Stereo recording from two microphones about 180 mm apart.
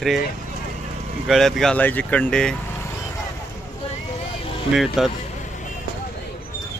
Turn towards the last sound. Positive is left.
turn(degrees=0)  # may be behind; listen again after turning